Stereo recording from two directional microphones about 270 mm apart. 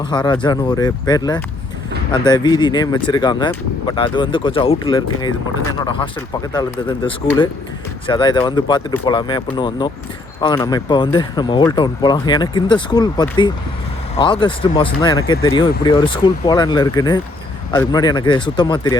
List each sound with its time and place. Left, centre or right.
0.0 s speech: centre